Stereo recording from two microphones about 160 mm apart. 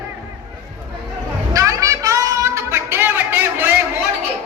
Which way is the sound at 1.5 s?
20° right (ahead or behind).